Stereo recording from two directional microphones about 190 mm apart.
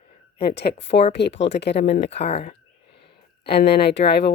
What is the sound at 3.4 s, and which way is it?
Speech, 60° left (ahead or behind).